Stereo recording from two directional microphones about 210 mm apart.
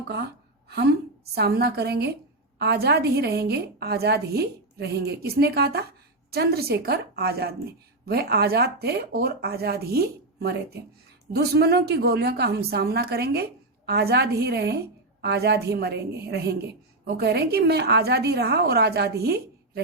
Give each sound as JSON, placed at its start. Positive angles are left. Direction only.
{"t": 0.7, "sound": "a woman's voice", "side_deg": -50}